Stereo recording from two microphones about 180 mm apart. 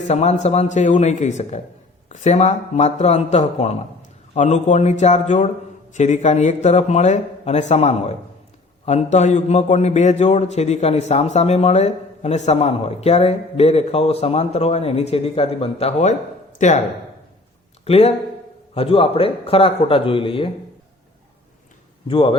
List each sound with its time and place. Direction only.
0.0 s a man's voice: 40° left (ahead or behind)
17.8 s a man's voice: 35° left (ahead or behind)
22.0 s speech: 30° left (ahead or behind)